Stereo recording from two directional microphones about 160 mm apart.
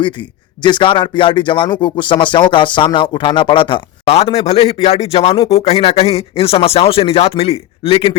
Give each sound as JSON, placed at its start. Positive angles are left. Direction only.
{"t": 0.6, "sound": "speech", "side_deg": 30}